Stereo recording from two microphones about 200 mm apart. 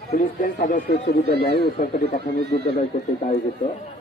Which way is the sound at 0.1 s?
40° left (ahead or behind).